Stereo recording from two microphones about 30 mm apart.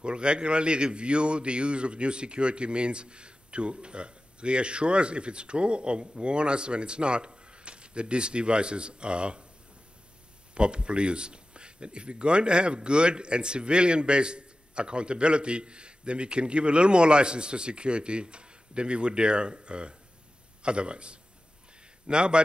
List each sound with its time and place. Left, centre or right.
0.0 s speech: right
10.5 s a man's voice: right